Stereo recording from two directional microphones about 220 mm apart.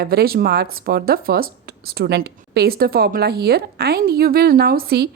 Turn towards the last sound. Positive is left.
turn(degrees=-45)  # may be behind; listen again after turning